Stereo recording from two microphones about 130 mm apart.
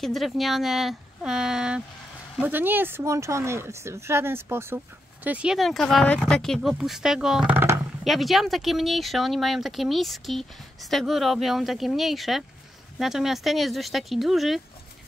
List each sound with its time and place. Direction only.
0.0 s speech: centre (ahead or behind)
7.5 s a sound: 20° right (ahead or behind)
8.0 s speech: centre (ahead or behind)